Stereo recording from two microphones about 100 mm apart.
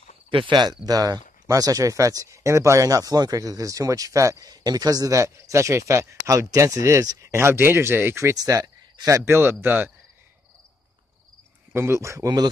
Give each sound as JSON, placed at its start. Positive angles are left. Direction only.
{"t": 0.3, "sound": "speech", "side_deg": -55}
{"t": 0.8, "sound": "speech", "side_deg": -40}
{"t": 11.7, "sound": "speech", "side_deg": -25}